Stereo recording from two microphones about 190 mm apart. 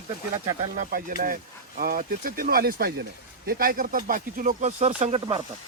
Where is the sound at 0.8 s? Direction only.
50° right (ahead or behind); by 5.4 s 35° right (ahead or behind).